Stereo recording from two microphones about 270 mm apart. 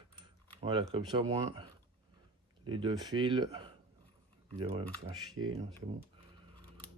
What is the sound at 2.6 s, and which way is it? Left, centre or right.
Speech, centre.